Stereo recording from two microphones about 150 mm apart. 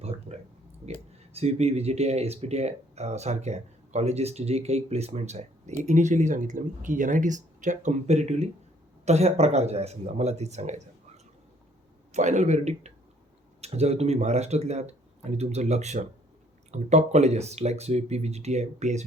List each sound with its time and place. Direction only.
0.0 s a sound: 45° right (ahead or behind)
1.3 s speech: 45° right (ahead or behind)
12.1 s speech: 50° right (ahead or behind)